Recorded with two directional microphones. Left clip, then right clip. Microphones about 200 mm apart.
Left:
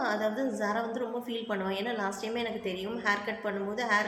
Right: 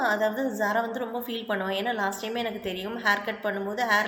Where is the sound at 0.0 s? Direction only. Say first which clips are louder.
Right 5 dB; 15° right (ahead or behind).